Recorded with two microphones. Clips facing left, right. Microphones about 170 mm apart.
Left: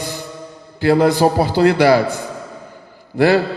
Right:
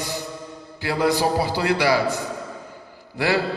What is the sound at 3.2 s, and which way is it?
Speech, 55° left (ahead or behind).